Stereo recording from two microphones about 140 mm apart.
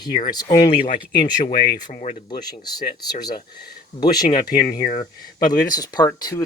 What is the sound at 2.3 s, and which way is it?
Speech, 30° left (ahead or behind).